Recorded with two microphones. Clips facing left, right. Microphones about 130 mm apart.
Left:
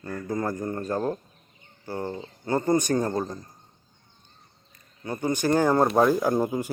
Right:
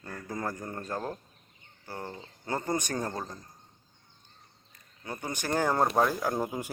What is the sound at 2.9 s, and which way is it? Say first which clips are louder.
Speech: left 8 dB; 10° left (ahead or behind).